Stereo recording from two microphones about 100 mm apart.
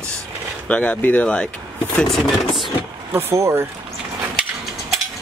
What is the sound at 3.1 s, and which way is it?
Speech, 25° right (ahead or behind).